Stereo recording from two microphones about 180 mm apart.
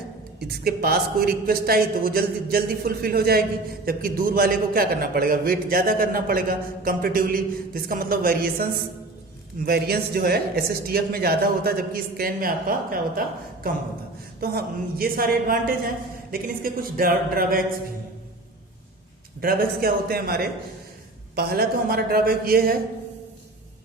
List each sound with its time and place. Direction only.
0.3 s a man's voice: 60° right (ahead or behind)
9.6 s a man's voice: 60° right (ahead or behind)
19.4 s speech: 55° right (ahead or behind)